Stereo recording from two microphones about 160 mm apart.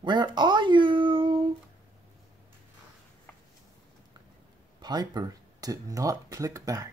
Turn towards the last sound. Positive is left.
turn(degrees=-20)  # may be behind; listen again after turning